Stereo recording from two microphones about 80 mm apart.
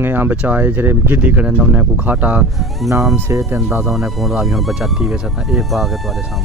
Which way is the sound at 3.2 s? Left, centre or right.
Right.